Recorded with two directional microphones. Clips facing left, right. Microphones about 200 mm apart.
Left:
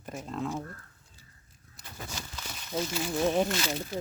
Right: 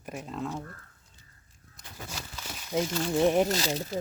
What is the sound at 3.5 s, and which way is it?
Speech, 35° right (ahead or behind).